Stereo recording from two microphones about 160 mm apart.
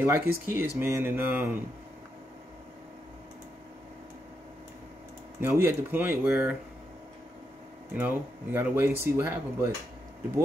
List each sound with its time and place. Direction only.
0.0 s speech: 15° right (ahead or behind)
5.4 s speech: 15° right (ahead or behind)
8.0 s speech: 15° right (ahead or behind)